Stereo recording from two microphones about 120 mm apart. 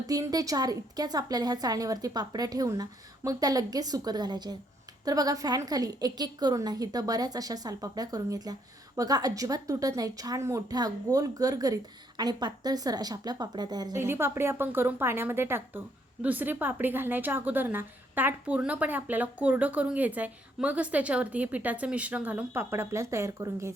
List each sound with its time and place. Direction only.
0.1 s a woman's voice: 30° right (ahead or behind)
14.0 s a woman's voice: 20° right (ahead or behind)